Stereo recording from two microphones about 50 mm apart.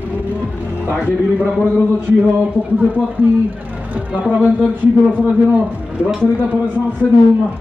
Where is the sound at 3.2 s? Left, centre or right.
Right.